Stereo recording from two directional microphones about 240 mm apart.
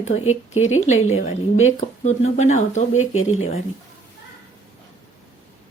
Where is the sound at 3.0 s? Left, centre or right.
Left.